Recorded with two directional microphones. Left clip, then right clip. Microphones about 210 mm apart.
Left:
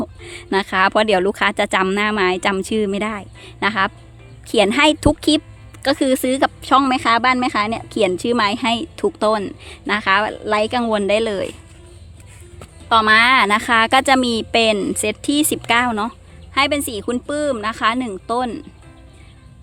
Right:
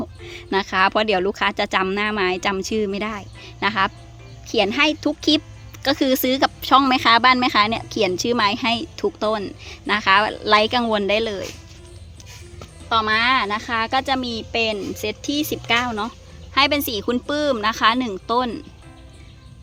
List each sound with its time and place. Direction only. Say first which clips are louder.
0.0 s a woman's voice: left 4 dB; 15° left (ahead or behind)
5.8 s a woman's voice: left 2 dB; 10° left (ahead or behind)
12.5 s a woman's voice: left 5 dB; 25° left (ahead or behind)
16.6 s a woman's voice: even; 5° left (ahead or behind)